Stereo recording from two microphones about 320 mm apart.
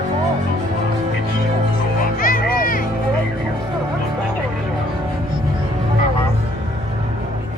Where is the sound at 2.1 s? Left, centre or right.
Left.